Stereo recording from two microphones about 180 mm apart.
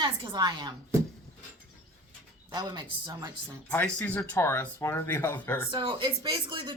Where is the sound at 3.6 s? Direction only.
10° left (ahead or behind).